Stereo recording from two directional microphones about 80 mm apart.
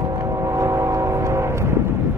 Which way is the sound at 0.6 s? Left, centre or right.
Right.